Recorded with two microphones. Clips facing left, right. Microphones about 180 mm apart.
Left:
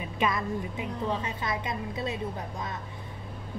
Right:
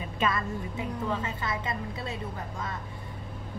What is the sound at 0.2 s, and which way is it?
A woman's voice, 15° left (ahead or behind).